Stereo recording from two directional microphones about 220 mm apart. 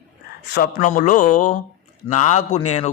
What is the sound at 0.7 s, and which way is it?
A man's voice, 35° left (ahead or behind).